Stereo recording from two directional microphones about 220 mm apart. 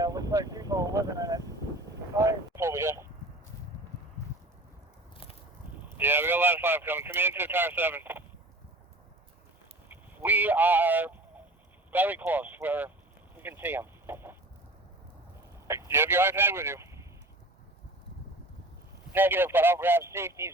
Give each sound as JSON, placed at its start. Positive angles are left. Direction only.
{"t": 0.0, "sound": "vehicle", "side_deg": -15}
{"t": 2.1, "sound": "a sound", "side_deg": -10}
{"t": 5.1, "sound": "biting", "side_deg": 25}
{"t": 6.0, "sound": "speech", "side_deg": -10}
{"t": 9.9, "sound": "a sound", "side_deg": -10}
{"t": 11.9, "sound": "speech", "side_deg": -10}
{"t": 15.6, "sound": "speech", "side_deg": -10}
{"t": 19.1, "sound": "speech", "side_deg": -10}